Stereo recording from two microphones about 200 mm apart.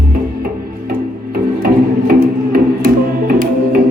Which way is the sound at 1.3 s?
45° right (ahead or behind).